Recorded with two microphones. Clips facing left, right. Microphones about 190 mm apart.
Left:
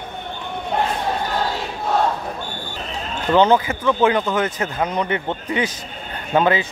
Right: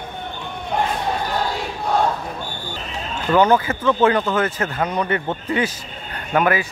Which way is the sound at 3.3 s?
20° left (ahead or behind).